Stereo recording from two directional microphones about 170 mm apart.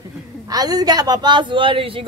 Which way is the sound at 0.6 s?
20° right (ahead or behind).